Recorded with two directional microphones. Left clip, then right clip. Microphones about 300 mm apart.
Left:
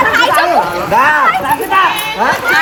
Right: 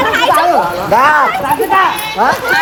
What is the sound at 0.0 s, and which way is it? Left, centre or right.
Chatter, centre.